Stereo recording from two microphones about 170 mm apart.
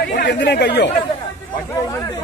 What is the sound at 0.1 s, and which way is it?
Speech, 80° left.